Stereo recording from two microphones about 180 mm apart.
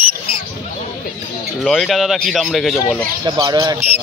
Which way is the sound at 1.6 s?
Centre (ahead or behind).